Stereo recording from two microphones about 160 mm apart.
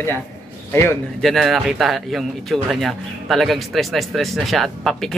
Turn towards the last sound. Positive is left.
turn(degrees=0)  # may be behind; listen again after turning